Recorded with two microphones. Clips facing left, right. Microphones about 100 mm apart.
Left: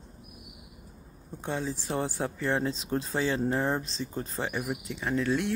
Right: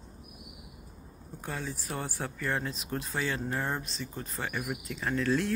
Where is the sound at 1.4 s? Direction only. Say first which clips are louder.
Left 5 dB; 25° left (ahead or behind).